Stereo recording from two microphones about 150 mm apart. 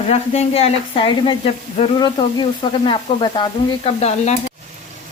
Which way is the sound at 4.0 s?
50° left (ahead or behind).